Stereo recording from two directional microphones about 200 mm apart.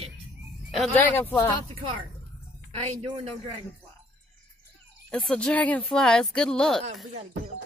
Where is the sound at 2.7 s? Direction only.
30° right (ahead or behind).